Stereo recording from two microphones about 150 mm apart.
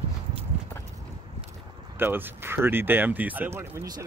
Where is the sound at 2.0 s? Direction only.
15° right (ahead or behind).